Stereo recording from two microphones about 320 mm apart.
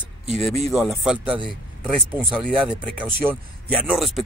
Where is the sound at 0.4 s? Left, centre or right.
Centre.